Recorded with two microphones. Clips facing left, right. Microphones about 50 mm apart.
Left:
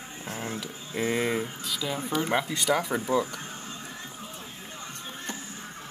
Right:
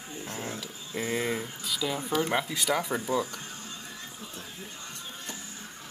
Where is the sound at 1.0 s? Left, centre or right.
Centre.